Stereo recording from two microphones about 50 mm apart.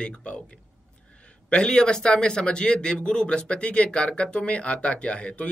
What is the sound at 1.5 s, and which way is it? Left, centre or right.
Speech, centre.